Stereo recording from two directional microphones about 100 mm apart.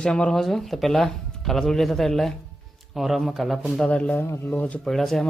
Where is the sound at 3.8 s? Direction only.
15° left (ahead or behind).